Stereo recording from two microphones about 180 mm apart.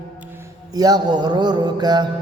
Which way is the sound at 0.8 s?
20° right (ahead or behind).